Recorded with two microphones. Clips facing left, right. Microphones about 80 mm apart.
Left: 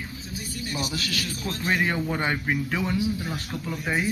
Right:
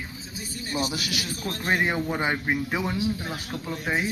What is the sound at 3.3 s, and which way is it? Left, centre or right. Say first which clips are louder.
Speech: even; centre.